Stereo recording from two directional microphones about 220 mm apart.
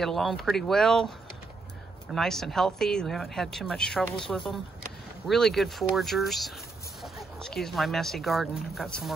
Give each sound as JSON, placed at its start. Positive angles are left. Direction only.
{"t": 0.0, "sound": "speech", "side_deg": 0}
{"t": 2.1, "sound": "speech", "side_deg": 0}